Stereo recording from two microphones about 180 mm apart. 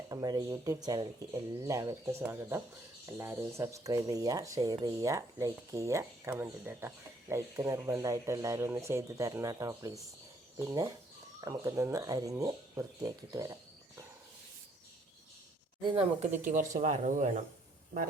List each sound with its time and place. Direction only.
0.1 s speech: 20° right (ahead or behind)
15.8 s speech: 30° right (ahead or behind)